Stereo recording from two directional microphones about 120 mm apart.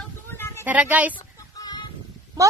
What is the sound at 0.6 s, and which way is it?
Speech, 15° right (ahead or behind).